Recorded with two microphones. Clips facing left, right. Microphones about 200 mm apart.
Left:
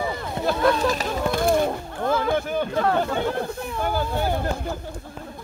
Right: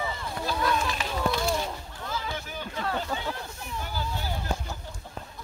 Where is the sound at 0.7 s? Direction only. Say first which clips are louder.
Left 7 dB; 40° left (ahead or behind).